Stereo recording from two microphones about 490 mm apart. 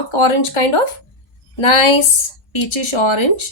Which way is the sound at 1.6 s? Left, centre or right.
Left.